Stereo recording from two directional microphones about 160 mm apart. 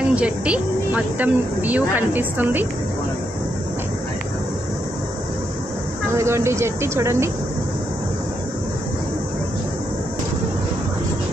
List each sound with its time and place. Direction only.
0.1 s speech: 10° right (ahead or behind)
6.1 s speech: 15° right (ahead or behind)